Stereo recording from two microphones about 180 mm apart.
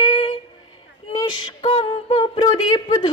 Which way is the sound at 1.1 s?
25° left (ahead or behind).